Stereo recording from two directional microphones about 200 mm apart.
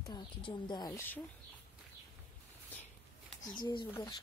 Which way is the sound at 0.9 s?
10° left (ahead or behind).